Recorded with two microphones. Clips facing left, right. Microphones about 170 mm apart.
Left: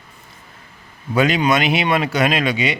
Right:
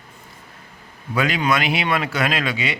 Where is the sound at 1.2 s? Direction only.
20° left (ahead or behind).